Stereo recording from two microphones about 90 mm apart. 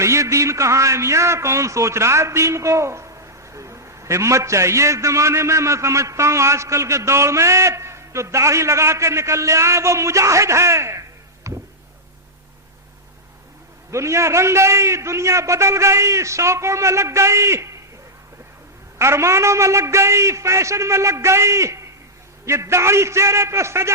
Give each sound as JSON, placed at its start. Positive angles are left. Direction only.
{"t": 0.0, "sound": "a man's voice", "side_deg": -35}
{"t": 11.5, "sound": "a sound", "side_deg": -35}
{"t": 13.9, "sound": "a man's voice", "side_deg": -30}
{"t": 18.9, "sound": "a man's voice", "side_deg": -30}